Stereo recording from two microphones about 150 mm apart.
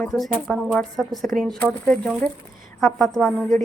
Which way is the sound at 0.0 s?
Centre (ahead or behind).